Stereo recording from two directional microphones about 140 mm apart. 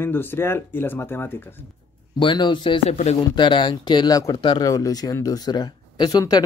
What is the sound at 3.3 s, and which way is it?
Speech, 35° left (ahead or behind).